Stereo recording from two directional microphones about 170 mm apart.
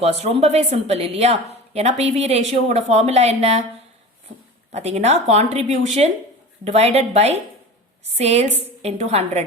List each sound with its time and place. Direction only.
0.0 s a woman's voice: 40° right (ahead or behind)
4.7 s a woman's voice: 40° right (ahead or behind)